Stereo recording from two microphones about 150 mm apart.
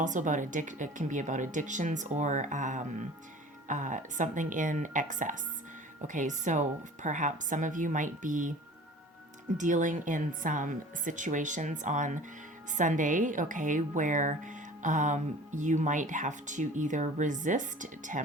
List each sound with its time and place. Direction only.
0.0 s a woman's voice: 55° right (ahead or behind)
9.6 s a woman's voice: 55° right (ahead or behind)